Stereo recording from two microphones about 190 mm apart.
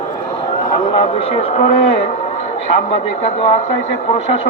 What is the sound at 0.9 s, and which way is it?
Speech, 30° left (ahead or behind).